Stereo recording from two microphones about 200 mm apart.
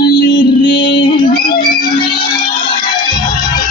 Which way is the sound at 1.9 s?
25° left (ahead or behind).